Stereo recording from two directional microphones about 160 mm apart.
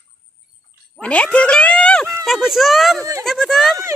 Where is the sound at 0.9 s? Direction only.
5° left (ahead or behind).